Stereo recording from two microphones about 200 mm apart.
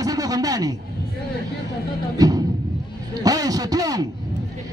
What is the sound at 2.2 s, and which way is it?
A man's voice, 20° right (ahead or behind).